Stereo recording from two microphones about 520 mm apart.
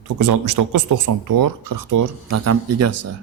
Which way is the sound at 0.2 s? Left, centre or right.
Right.